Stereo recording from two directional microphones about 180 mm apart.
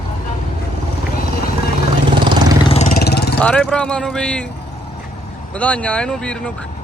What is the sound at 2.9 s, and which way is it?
Vehicle, 60° left (ahead or behind).